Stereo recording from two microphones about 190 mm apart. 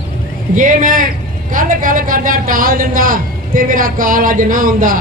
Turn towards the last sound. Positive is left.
turn(degrees=-45)  # may be behind; listen again after turning